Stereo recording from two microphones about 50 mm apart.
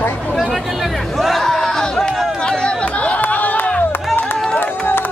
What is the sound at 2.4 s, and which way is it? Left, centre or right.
Chatter, centre.